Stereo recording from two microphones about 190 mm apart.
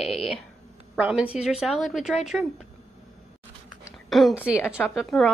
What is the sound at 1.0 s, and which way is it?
A woman's voice, 5° right (ahead or behind).